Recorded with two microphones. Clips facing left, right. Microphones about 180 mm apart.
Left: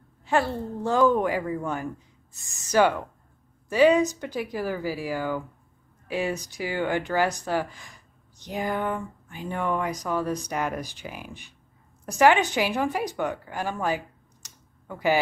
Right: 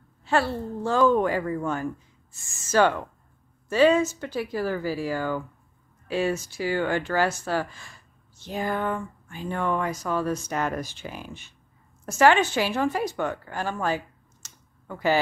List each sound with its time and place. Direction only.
0.2 s speech: 15° left (ahead or behind)